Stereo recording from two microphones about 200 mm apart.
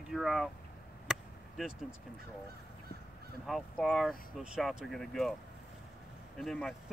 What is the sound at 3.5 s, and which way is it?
Speech, centre (ahead or behind).